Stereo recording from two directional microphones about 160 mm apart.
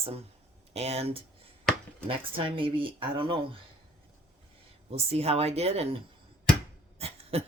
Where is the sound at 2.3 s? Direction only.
35° right (ahead or behind).